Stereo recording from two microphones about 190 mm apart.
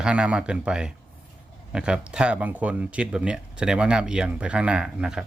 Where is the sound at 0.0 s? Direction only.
5° right (ahead or behind).